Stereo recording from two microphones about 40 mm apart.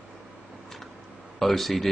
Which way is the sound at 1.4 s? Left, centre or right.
Centre.